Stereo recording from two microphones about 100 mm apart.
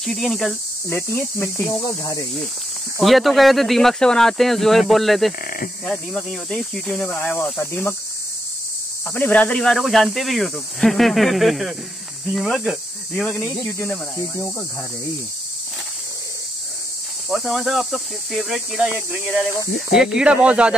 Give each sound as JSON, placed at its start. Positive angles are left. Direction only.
{"t": 0.0, "sound": "speech", "side_deg": 0}
{"t": 0.8, "sound": "speech", "side_deg": 25}
{"t": 3.0, "sound": "speech", "side_deg": 0}
{"t": 6.9, "sound": "speech", "side_deg": 20}
{"t": 9.1, "sound": "speech", "side_deg": 15}
{"t": 9.6, "sound": "speech", "side_deg": 5}
{"t": 13.2, "sound": "speech", "side_deg": 15}
{"t": 17.3, "sound": "speech", "side_deg": 0}